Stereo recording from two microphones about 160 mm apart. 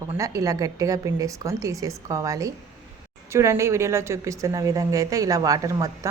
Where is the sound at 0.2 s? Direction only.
20° right (ahead or behind).